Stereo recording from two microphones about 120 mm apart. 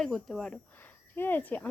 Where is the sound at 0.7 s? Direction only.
15° left (ahead or behind).